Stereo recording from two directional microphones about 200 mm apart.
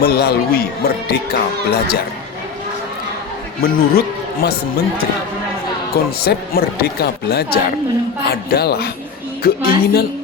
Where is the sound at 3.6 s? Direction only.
50° left (ahead or behind).